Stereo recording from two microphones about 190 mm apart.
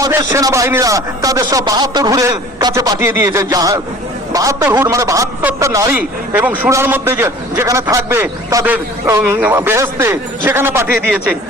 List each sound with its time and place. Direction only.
0.0 s a man's voice: 15° right (ahead or behind)